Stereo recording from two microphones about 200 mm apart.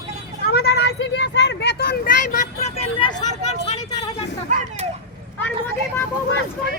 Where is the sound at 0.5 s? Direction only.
50° left (ahead or behind); by 3.2 s 25° left (ahead or behind).